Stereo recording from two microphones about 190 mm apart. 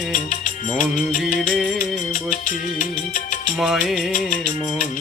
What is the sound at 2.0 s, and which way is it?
Music, 45° left (ahead or behind).